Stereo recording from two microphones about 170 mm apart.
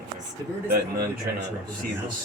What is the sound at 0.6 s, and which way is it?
Speech, 70° right (ahead or behind).